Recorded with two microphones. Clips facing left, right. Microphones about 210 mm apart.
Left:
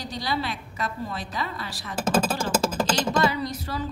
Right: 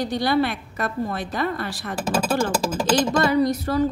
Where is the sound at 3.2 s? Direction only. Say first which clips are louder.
Right 6 dB; 50° right (ahead or behind).